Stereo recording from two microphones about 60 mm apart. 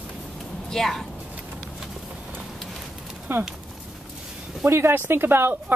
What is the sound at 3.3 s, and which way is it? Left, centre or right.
Speech, right.